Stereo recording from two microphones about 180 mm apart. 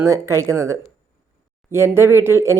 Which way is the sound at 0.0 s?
15° right (ahead or behind).